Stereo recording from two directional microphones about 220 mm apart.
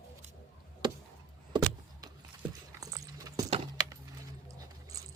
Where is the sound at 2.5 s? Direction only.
15° right (ahead or behind).